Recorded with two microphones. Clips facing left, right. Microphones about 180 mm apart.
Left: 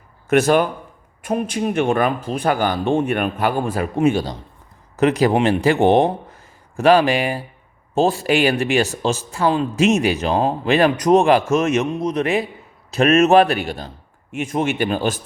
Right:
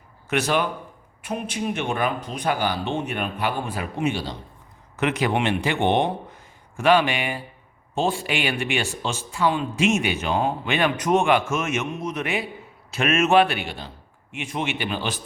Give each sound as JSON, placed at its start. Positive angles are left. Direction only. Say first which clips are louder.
{"t": 0.3, "sound": "a man's voice", "louder": "left 8 dB", "side_deg": 45}